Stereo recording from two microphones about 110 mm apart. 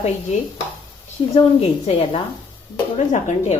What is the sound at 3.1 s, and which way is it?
Speech, 90° left.